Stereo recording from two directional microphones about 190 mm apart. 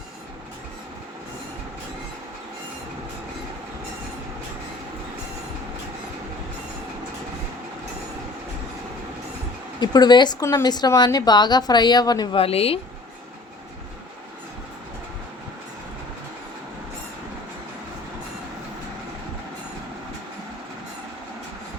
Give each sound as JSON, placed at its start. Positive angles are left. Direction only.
{"t": 9.8, "sound": "a woman's voice", "side_deg": 20}